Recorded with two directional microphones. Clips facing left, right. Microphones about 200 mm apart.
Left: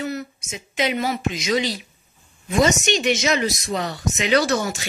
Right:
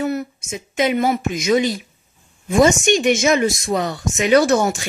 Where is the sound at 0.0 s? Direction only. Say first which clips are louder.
Right 6 dB; 50° right (ahead or behind).